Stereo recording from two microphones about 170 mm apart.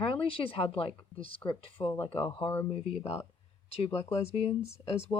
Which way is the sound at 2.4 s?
10° left (ahead or behind).